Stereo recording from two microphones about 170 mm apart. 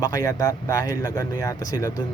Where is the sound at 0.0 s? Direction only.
20° left (ahead or behind).